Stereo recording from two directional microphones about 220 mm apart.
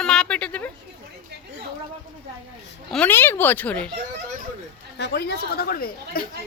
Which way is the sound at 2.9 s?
10° left (ahead or behind).